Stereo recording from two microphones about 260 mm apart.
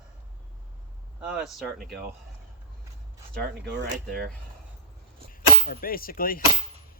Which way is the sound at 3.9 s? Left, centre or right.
Right.